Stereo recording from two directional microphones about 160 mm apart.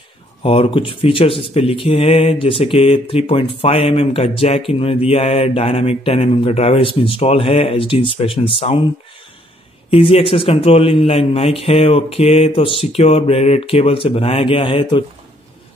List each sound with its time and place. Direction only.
0.4 s speech: 35° left (ahead or behind)
9.8 s speech: 35° left (ahead or behind)